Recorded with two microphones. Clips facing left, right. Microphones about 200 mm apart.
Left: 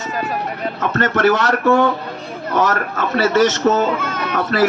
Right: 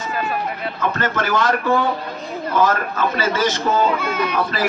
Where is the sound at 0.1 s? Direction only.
20° left (ahead or behind).